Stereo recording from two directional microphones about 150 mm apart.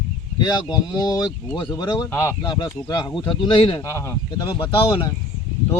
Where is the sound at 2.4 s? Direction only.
30° left (ahead or behind).